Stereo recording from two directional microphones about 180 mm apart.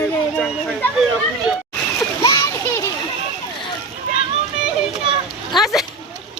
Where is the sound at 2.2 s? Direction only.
20° left (ahead or behind).